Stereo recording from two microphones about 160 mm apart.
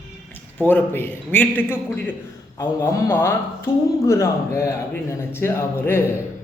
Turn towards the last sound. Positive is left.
turn(degrees=15)  # may be behind; listen again after turning